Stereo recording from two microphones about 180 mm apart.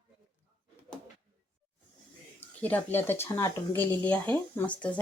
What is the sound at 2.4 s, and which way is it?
Speech, 10° left (ahead or behind).